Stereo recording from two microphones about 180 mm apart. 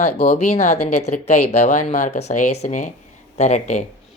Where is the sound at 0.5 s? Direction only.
40° left (ahead or behind).